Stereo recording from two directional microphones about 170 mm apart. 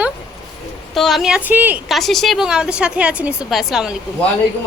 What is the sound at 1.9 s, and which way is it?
A woman's voice, centre (ahead or behind).